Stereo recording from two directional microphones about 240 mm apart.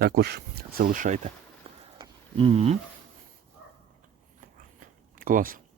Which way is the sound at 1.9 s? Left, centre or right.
Centre.